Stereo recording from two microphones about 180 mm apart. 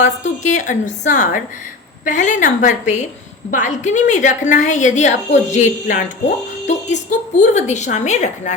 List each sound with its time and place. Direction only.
0.4 s a woman's voice: 45° left (ahead or behind)